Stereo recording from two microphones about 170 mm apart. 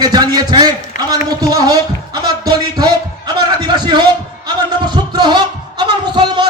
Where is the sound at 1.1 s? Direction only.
20° right (ahead or behind).